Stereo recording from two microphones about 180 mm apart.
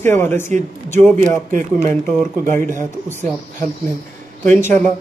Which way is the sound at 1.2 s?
45° right (ahead or behind).